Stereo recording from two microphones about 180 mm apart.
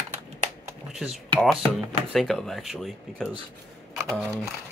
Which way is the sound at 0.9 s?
5° right (ahead or behind).